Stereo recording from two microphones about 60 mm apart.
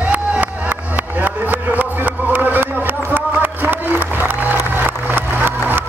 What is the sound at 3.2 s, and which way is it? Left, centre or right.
Music, right.